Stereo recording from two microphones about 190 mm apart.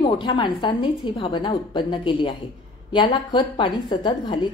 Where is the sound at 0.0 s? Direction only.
25° left (ahead or behind).